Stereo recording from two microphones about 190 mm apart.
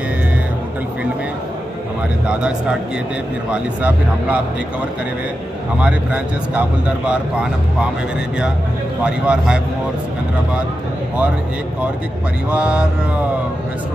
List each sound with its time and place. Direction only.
3.5 s speech: 5° right (ahead or behind)
5.8 s speech: 5° right (ahead or behind)
9.0 s speech: 5° right (ahead or behind)
12.4 s speech: 5° right (ahead or behind)